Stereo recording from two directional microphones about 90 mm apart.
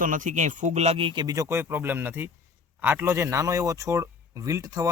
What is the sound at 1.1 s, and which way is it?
Speech, 40° right (ahead or behind).